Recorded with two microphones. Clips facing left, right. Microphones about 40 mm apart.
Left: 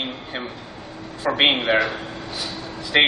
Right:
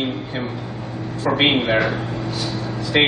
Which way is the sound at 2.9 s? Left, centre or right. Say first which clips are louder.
Even; centre.